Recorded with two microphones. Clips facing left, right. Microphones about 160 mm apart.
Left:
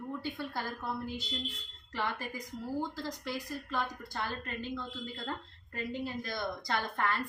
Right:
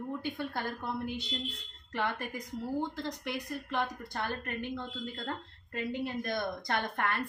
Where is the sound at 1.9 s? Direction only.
60° right (ahead or behind).